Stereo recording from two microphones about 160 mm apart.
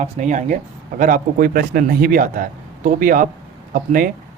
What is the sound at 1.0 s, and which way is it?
Speech, 60° right (ahead or behind).